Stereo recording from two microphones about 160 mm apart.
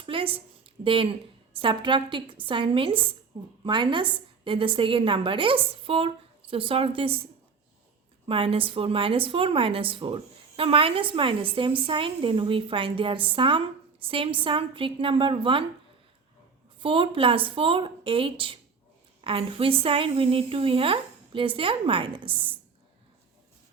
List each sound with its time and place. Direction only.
0.0 s a sound: 35° right (ahead or behind)
1.6 s a woman's voice: 30° right (ahead or behind)
8.3 s a woman's voice: 35° right (ahead or behind)
16.8 s a woman's voice: 30° right (ahead or behind)